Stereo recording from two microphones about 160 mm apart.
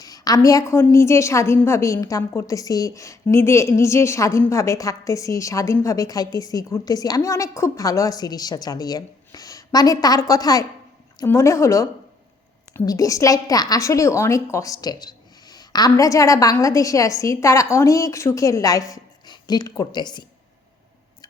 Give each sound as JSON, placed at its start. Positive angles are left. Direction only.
{"t": 0.0, "sound": "a woman's voice", "side_deg": 20}